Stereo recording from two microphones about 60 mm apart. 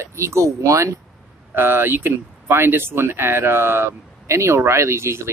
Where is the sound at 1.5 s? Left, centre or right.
Right.